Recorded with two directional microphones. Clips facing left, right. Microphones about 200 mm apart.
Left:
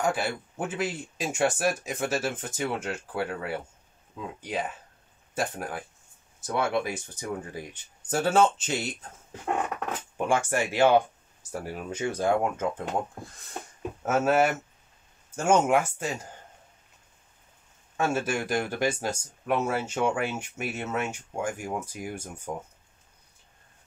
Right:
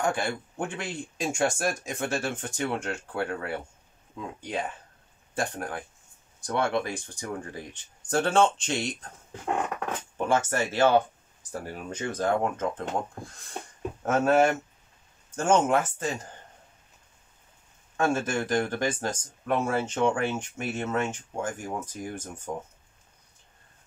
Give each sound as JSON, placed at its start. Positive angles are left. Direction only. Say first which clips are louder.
{"t": 0.0, "sound": "speech", "louder": "even", "side_deg": 5}
{"t": 10.1, "sound": "speech", "louder": "even", "side_deg": 15}
{"t": 17.9, "sound": "speech", "louder": "right 1 dB", "side_deg": 10}